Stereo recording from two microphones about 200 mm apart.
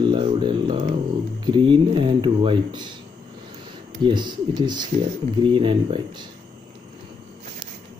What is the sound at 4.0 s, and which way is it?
Speech, 20° right (ahead or behind).